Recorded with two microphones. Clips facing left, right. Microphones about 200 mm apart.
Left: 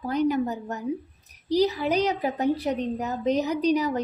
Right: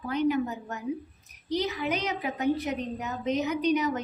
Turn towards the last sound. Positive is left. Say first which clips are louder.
# left 3 dB
turn(degrees=35)  # may be behind; listen again after turning